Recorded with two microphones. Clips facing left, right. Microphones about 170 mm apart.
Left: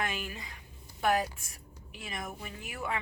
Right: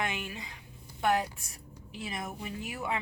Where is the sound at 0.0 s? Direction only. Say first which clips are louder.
Right 1 dB; 20° right (ahead or behind).